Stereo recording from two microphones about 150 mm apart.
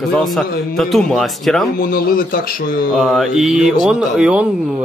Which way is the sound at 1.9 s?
75° left (ahead or behind).